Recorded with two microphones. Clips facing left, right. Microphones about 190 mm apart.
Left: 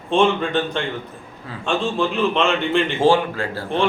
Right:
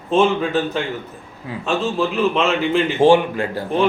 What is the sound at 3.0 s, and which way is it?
Speech, 15° right (ahead or behind).